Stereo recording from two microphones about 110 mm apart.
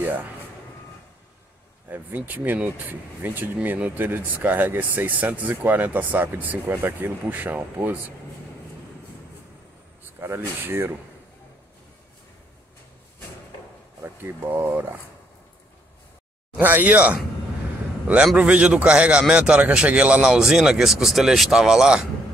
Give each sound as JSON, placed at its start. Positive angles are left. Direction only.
{"t": 0.0, "sound": "speech", "side_deg": -15}
{"t": 1.9, "sound": "speech", "side_deg": -15}
{"t": 10.2, "sound": "speech", "side_deg": -20}
{"t": 14.0, "sound": "speech", "side_deg": -20}
{"t": 16.5, "sound": "speech", "side_deg": -15}